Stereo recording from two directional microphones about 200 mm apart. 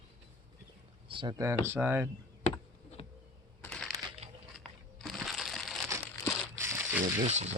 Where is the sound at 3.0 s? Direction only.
30° left (ahead or behind).